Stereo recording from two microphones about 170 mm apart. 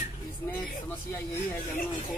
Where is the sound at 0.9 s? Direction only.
15° left (ahead or behind).